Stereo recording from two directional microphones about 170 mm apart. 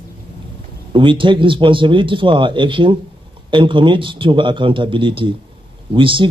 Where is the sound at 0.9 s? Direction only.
30° right (ahead or behind).